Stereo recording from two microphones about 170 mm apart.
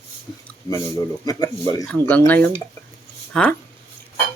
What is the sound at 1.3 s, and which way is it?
Speech, 20° left (ahead or behind).